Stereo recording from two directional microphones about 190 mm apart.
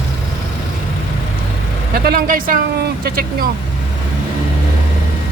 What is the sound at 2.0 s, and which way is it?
Speech, 50° right (ahead or behind).